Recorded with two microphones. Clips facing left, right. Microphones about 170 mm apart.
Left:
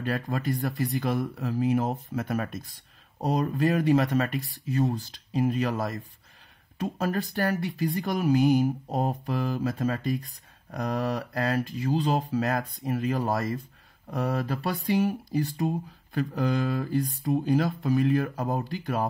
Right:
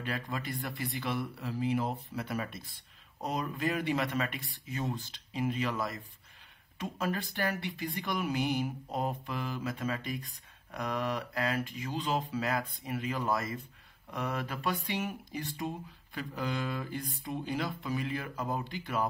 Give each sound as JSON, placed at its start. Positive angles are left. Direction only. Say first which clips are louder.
{"t": 0.0, "sound": "speech", "louder": "left 8 dB", "side_deg": 40}